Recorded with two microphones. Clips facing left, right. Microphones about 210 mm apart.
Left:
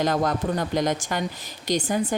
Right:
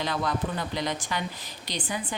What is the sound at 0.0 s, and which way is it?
Speech, 45° left (ahead or behind).